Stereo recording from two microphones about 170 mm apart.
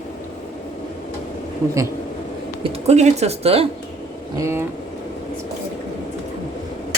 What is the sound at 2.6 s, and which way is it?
Speech, 40° right (ahead or behind).